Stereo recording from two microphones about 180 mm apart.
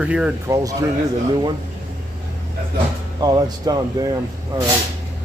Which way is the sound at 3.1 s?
20° right (ahead or behind).